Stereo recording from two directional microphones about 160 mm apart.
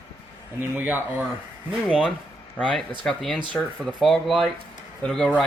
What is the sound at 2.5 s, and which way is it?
Speech, 5° left (ahead or behind).